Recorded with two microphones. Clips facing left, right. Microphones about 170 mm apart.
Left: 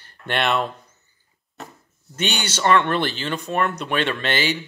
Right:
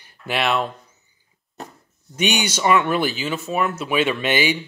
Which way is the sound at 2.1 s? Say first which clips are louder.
Right 4 dB; 10° right (ahead or behind).